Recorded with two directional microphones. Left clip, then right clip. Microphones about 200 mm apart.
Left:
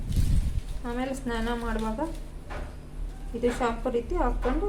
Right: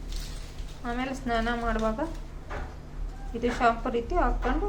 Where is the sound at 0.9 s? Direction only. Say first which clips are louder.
Right 1 dB; 5° right (ahead or behind).